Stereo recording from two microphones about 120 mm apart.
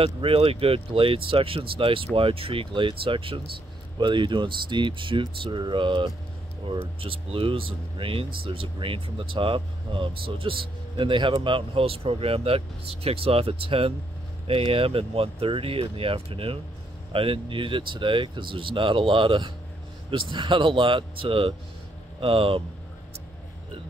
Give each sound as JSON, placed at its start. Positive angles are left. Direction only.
{"t": 0.0, "sound": "speech", "side_deg": -50}